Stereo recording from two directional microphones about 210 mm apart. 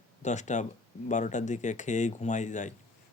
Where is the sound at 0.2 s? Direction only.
35° left (ahead or behind).